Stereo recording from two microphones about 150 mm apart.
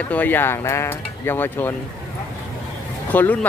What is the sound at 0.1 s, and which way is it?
Speech, 10° left (ahead or behind).